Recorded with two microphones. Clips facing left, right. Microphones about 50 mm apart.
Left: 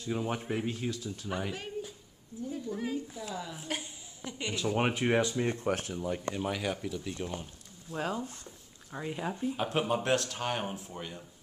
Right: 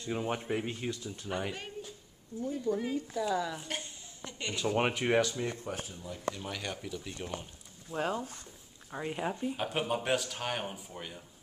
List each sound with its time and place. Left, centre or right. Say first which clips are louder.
0.0 s speech: left 1 dB; centre
3.2 s speech: right 7 dB; right
3.5 s a woman's voice: left 1 dB; centre
4.6 s speech: even; centre
5.4 s speech: left 4 dB; left
5.7 s speech: left 8 dB; left
6.5 s speech: left 5 dB; centre
9.6 s speech: left 5 dB; centre